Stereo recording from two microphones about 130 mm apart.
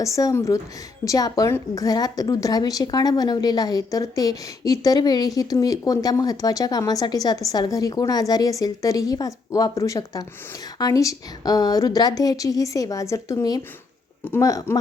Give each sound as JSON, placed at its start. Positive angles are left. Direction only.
{"t": 0.0, "sound": "a woman's voice", "side_deg": 25}